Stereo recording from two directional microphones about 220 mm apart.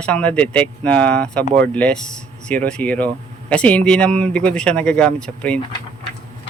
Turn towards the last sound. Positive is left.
turn(degrees=5)  # may be behind; listen again after turning